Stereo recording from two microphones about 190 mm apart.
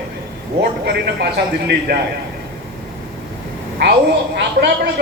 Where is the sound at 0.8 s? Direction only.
60° right (ahead or behind).